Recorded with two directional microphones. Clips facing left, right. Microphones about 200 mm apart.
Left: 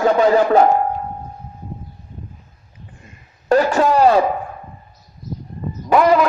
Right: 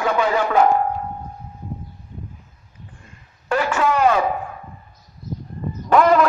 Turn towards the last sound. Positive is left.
turn(degrees=5)  # may be behind; listen again after turning